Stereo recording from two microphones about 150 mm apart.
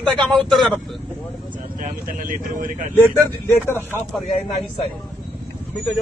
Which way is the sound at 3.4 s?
15° left (ahead or behind).